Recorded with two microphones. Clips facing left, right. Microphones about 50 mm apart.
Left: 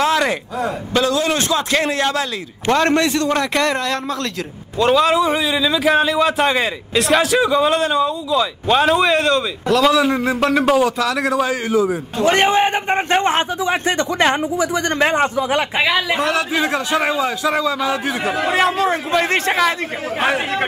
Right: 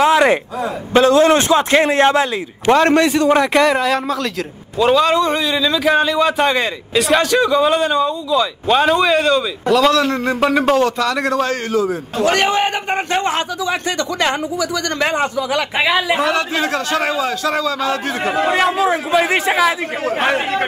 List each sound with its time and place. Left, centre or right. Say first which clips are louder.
0.0 s a sound: right 4 dB; centre
0.9 s a man's voice: right 7 dB; right
2.7 s a man's voice: right 3 dB; centre
9.9 s a man's voice: even; centre
10.4 s speech: right 1 dB; centre
12.3 s a man's voice: left 2 dB; left
15.1 s speech: left 1 dB; left
15.8 s speech: right 5 dB; centre
16.5 s a man's voice: even; centre
18.5 s speech: even; centre